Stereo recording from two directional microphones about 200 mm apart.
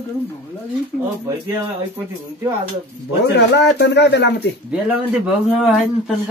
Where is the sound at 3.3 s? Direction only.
60° left (ahead or behind).